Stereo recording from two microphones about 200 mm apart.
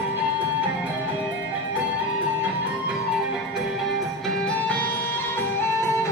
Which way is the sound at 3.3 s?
Centre (ahead or behind).